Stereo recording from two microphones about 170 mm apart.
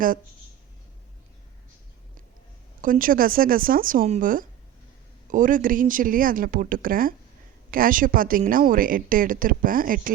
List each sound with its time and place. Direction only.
2.8 s speech: 55° right (ahead or behind)